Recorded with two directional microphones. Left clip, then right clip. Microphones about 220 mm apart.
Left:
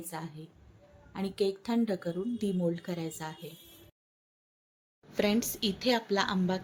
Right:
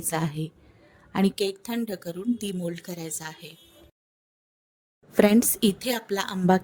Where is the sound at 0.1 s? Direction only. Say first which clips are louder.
Right 17 dB; 50° right (ahead or behind).